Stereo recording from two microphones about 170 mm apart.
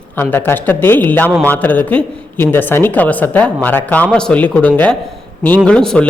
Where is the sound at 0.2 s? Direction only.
10° left (ahead or behind).